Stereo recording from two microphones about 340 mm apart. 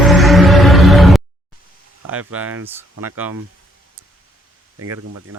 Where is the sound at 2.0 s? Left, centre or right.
Right.